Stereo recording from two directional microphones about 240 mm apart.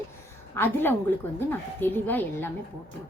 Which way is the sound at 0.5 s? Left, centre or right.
Centre.